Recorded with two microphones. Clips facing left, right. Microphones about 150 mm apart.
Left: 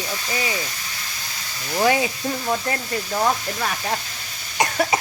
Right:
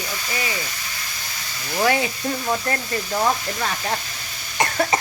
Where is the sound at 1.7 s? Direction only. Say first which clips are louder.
Left 1 dB; 15° left (ahead or behind).